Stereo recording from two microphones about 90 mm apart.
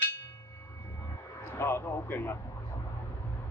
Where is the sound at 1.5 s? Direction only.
30° left (ahead or behind).